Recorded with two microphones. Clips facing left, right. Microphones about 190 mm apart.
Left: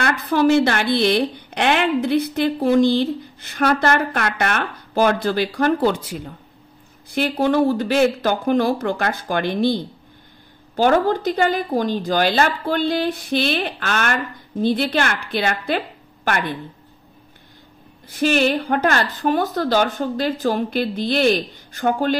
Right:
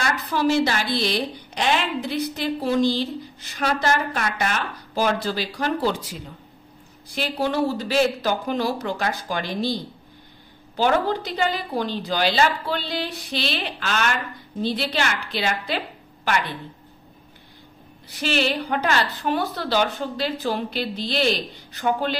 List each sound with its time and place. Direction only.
0.0 s a woman's voice: 55° left (ahead or behind)
10.8 s a woman's voice: 50° left (ahead or behind)
18.1 s a woman's voice: 50° left (ahead or behind)